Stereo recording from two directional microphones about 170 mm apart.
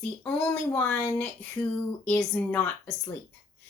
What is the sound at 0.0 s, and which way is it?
Speech, 5° left (ahead or behind).